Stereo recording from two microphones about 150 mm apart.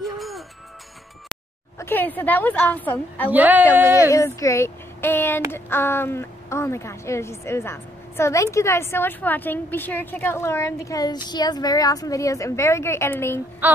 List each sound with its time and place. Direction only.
0.0 s music: centre (ahead or behind)
1.8 s a woman's voice: 15° left (ahead or behind)
3.3 s speech: 10° right (ahead or behind)
4.1 s a woman's voice: 20° left (ahead or behind)